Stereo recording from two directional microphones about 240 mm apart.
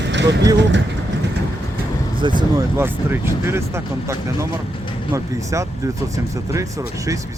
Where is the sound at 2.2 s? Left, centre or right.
Centre.